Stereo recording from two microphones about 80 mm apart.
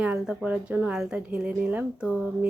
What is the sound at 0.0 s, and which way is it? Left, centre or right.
A woman's voice, centre.